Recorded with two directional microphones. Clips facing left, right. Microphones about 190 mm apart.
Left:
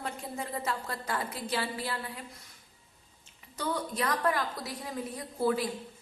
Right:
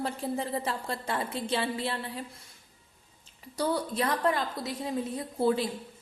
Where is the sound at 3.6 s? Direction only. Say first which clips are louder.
Right 4 dB; 30° right (ahead or behind).